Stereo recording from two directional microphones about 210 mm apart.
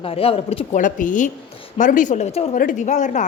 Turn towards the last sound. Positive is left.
turn(degrees=35)  # may be behind; listen again after turning